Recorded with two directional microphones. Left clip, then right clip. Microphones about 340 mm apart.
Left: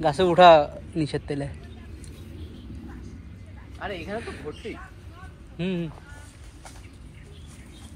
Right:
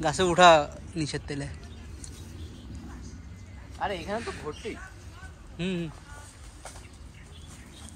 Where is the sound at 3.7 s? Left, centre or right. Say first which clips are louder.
Right 1 dB; right.